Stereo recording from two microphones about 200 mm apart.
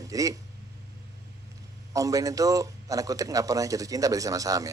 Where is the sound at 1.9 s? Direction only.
15° right (ahead or behind).